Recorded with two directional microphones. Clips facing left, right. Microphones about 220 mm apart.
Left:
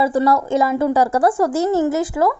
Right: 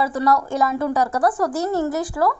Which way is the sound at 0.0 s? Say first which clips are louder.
Left 4 dB; 25° left (ahead or behind).